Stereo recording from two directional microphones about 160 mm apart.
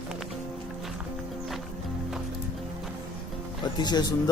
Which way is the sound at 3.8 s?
25° left (ahead or behind).